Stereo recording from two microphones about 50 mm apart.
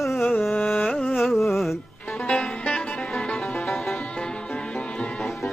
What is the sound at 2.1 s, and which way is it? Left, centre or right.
Music, left.